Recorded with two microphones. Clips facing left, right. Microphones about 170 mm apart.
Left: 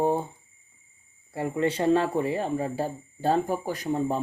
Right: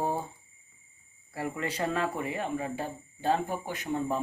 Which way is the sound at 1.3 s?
25° left (ahead or behind).